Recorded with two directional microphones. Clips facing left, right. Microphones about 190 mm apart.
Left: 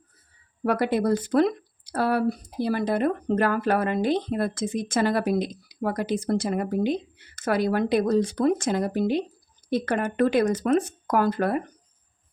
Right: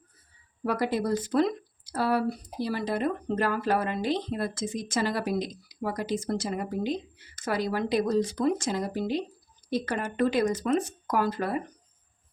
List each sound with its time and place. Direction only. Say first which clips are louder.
0.6 s speech: left 4 dB; 60° left (ahead or behind)